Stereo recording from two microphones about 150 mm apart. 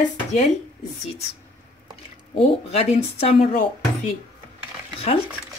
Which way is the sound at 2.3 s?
45° left (ahead or behind).